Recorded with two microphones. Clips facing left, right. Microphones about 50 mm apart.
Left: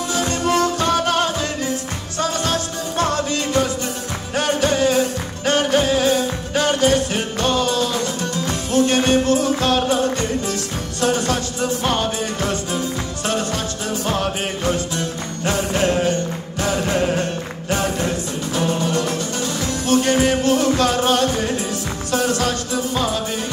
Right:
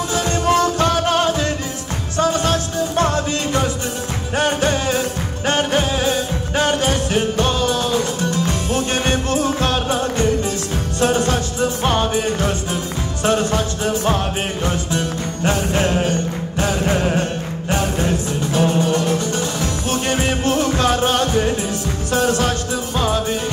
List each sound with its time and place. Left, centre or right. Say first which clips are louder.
0.1 s music: right 2 dB; right